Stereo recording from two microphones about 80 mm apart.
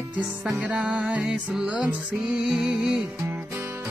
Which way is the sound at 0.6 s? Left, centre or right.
Centre.